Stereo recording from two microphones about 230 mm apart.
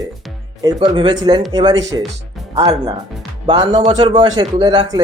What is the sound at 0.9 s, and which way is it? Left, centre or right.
A man's voice, centre.